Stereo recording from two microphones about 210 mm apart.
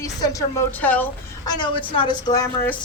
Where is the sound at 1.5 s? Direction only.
20° left (ahead or behind).